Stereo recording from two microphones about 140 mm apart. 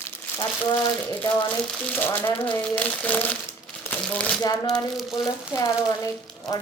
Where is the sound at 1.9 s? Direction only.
15° left (ahead or behind).